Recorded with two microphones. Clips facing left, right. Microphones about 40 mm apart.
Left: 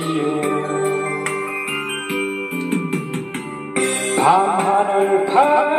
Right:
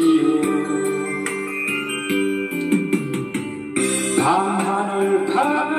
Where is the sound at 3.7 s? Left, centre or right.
Left.